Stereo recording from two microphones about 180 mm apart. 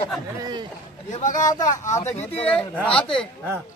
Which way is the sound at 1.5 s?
20° left (ahead or behind).